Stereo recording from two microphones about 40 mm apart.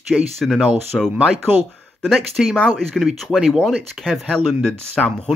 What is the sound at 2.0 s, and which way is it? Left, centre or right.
Speech, centre.